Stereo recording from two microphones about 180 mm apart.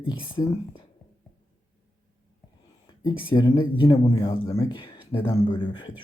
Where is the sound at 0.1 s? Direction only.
30° left (ahead or behind).